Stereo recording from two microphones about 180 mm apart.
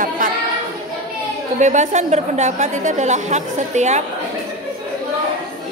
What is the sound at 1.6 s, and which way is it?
A woman's voice, 40° right (ahead or behind).